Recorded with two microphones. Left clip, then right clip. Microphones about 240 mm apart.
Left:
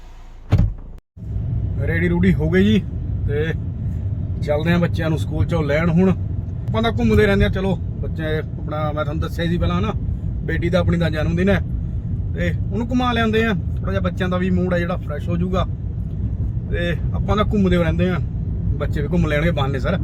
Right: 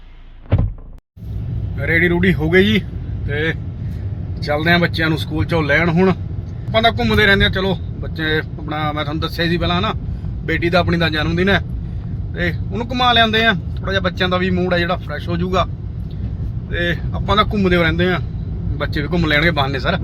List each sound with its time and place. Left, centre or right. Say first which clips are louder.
1.8 s speech: right 6 dB; centre
12.7 s speech: right 7 dB; centre
16.7 s speech: right 4 dB; centre